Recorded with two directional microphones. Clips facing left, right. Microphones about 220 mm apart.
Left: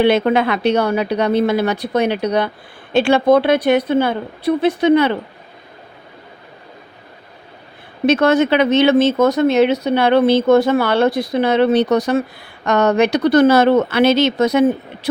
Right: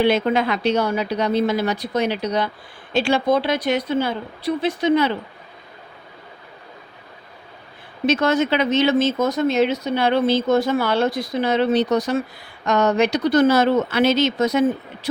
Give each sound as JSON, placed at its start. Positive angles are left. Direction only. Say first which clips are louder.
{"t": 0.0, "sound": "speech", "louder": "left 4 dB", "side_deg": 65}
{"t": 8.0, "sound": "speech", "louder": "left 5 dB", "side_deg": 60}